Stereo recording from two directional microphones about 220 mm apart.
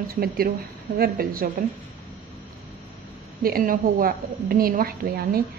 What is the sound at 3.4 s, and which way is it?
A woman's voice, 40° right (ahead or behind).